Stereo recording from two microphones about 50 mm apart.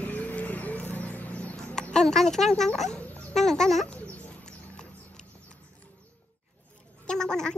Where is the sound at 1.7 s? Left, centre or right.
Centre.